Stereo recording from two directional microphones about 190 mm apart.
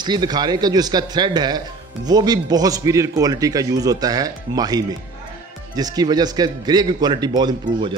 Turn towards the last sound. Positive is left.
turn(degrees=-20)  # may be behind; listen again after turning